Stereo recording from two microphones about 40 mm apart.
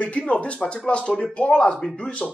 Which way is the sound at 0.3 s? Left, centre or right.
Left.